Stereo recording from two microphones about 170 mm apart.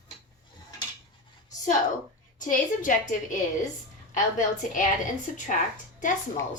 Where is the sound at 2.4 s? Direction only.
50° left (ahead or behind).